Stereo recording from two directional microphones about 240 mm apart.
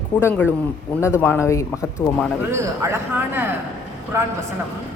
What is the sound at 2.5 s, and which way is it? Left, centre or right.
A woman's voice, centre.